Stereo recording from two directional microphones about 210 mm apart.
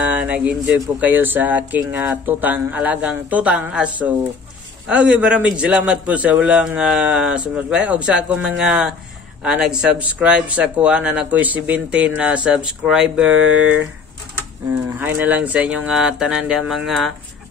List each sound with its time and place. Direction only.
0.0 s speech: 5° right (ahead or behind)
15.0 s speech: 10° right (ahead or behind)